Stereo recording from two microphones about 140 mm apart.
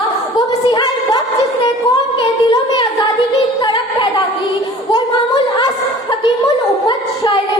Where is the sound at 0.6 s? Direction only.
30° left (ahead or behind).